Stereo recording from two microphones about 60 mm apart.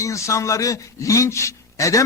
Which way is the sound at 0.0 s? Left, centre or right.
Left.